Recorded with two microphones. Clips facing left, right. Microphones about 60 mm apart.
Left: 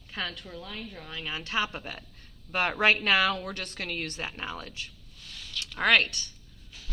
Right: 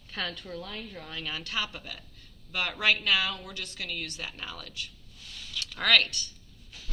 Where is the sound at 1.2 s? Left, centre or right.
Left.